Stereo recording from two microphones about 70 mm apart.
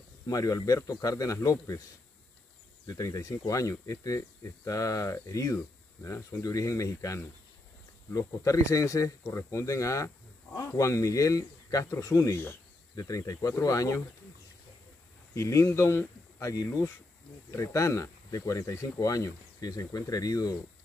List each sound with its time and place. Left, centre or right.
0.3 s speech: left
2.9 s speech: left
6.0 s speech: left
6.4 s speech: left
15.3 s speech: left